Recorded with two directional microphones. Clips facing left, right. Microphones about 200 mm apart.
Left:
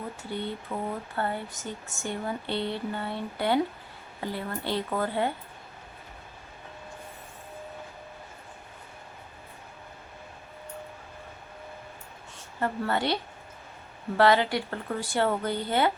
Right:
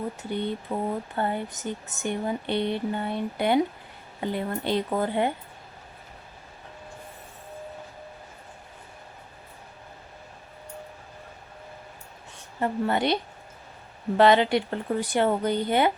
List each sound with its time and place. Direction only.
0.2 s speech: 20° right (ahead or behind)
12.5 s speech: 15° right (ahead or behind)
14.2 s speech: 20° right (ahead or behind)